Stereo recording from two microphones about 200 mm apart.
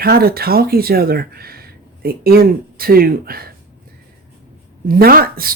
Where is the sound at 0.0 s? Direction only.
50° right (ahead or behind).